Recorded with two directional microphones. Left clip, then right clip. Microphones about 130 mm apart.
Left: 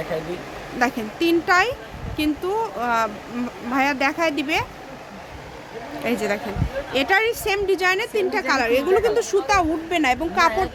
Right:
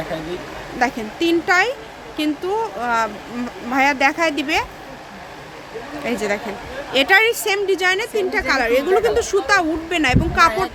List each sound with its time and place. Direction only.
0.8 s a woman's voice: 5° left (ahead or behind)
6.1 s speech: 10° left (ahead or behind)
6.9 s a woman's voice: 10° right (ahead or behind)